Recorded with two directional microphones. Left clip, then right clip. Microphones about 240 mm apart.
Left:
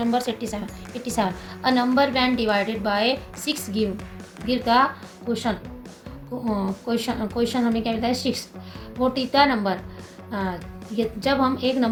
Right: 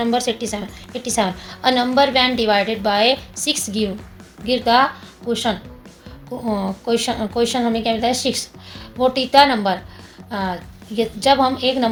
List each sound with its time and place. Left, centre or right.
0.0 s a woman's voice: right
6.3 s a woman's voice: right